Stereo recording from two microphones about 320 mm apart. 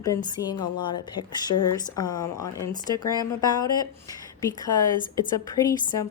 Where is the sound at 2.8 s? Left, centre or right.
Centre.